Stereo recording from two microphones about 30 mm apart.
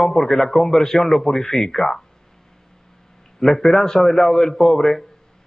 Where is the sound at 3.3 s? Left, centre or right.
Centre.